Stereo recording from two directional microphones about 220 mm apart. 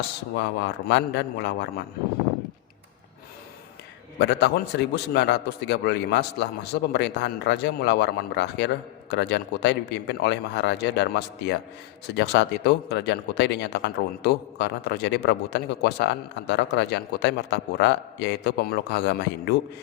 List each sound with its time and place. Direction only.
0.3 s speech: 50° left (ahead or behind)
4.2 s speech: 50° left (ahead or behind)